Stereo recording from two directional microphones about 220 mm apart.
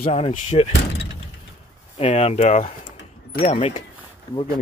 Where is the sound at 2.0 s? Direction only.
30° left (ahead or behind).